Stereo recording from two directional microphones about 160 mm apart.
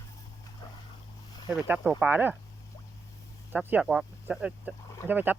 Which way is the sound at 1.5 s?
10° right (ahead or behind).